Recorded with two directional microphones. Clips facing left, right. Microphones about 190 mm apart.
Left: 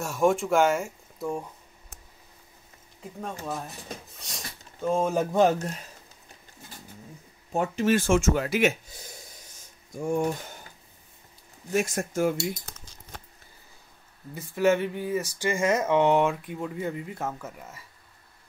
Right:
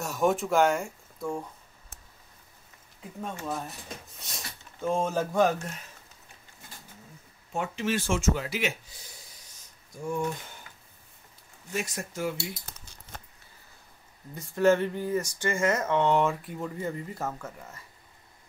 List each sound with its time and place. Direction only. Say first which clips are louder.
0.0 s speech: left 3 dB; centre (ahead or behind)
4.1 s speech: left 1 dB; centre (ahead or behind)
5.1 s a sound: left 3 dB; 20° left (ahead or behind)
7.5 s speech: left 6 dB; 40° left (ahead or behind)
11.7 s speech: left 7 dB; 50° left (ahead or behind)
14.3 s speech: even; 5° left (ahead or behind)
16.3 s speech: left 2 dB; centre (ahead or behind)